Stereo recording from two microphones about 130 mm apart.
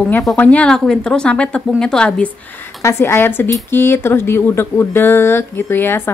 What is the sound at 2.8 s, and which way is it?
Speech, 20° left (ahead or behind).